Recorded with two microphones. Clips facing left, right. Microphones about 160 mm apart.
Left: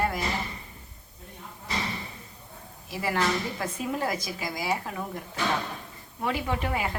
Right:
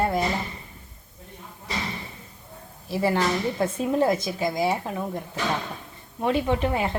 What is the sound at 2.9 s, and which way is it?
A woman's voice, 30° right (ahead or behind).